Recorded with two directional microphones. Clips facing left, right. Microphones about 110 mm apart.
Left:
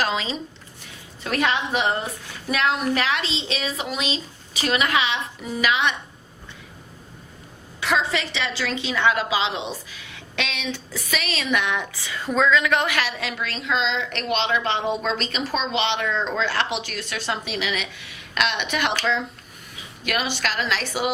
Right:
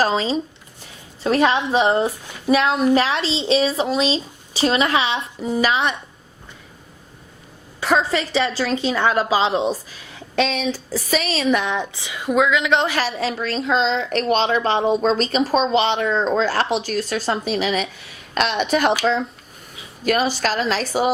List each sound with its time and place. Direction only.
0.0 s a woman's voice: 35° right (ahead or behind)
7.8 s a woman's voice: 40° right (ahead or behind)
11.9 s a woman's voice: 15° right (ahead or behind); by 18.9 s 40° right (ahead or behind)
20.1 s a woman's voice: 40° right (ahead or behind)